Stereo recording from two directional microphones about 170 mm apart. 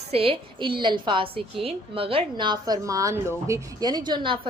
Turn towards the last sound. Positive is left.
turn(degrees=-25)  # may be behind; listen again after turning